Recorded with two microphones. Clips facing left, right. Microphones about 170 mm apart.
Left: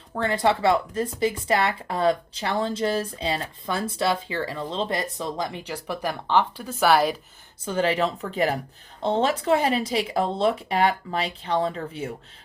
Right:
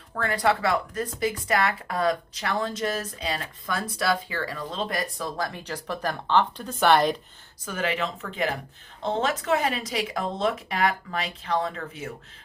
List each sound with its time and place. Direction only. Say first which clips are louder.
0.1 s speech: left 2 dB; 25° left (ahead or behind); by 7.2 s 5° left (ahead or behind)
7.6 s speech: left 5 dB; 30° left (ahead or behind)